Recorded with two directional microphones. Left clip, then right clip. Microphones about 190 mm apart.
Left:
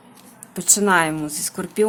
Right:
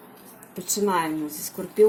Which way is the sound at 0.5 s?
30° left (ahead or behind).